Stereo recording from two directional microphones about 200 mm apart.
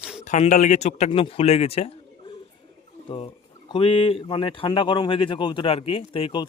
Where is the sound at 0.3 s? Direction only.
35° left (ahead or behind).